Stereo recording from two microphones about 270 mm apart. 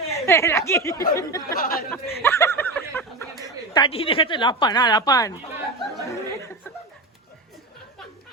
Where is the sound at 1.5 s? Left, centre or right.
Left.